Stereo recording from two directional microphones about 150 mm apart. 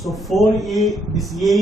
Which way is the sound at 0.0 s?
Centre (ahead or behind).